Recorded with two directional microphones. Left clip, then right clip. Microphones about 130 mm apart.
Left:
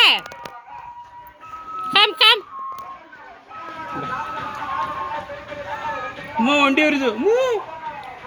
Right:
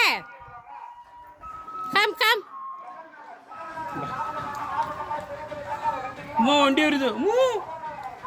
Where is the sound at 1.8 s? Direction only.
10° right (ahead or behind).